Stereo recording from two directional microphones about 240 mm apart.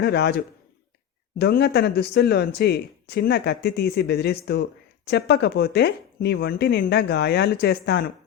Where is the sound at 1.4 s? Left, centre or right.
Left.